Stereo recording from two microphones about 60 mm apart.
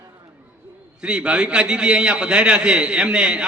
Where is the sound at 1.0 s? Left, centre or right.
Centre.